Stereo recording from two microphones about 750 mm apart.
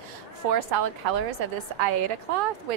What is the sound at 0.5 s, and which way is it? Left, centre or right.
Speech, right.